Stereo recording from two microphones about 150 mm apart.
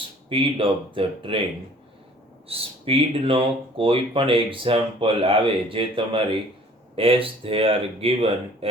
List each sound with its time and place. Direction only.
0.3 s speech: 35° right (ahead or behind)
2.5 s speech: 40° right (ahead or behind)